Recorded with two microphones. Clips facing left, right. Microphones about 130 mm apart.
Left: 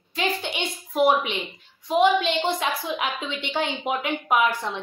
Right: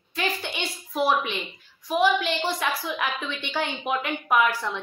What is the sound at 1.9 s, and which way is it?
A woman's voice, 25° left (ahead or behind).